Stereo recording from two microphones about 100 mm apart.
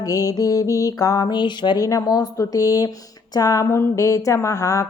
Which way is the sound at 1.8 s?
35° left (ahead or behind).